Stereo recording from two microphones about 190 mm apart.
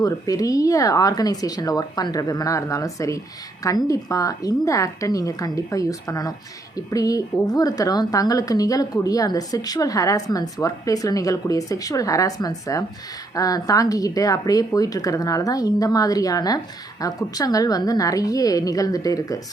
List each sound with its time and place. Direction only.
0.0 s a woman's voice: 20° left (ahead or behind)